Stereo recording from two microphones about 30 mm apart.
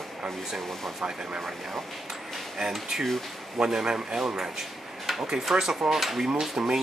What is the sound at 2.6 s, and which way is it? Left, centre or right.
Speech, centre.